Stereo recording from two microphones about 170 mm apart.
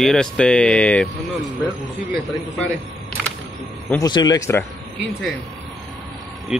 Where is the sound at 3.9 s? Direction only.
20° left (ahead or behind).